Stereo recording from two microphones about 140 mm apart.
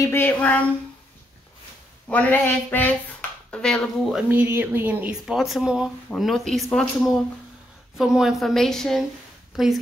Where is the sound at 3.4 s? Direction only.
5° left (ahead or behind).